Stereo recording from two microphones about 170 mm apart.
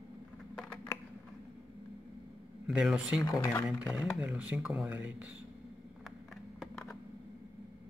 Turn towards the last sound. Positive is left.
turn(degrees=0)  # may be behind; listen again after turning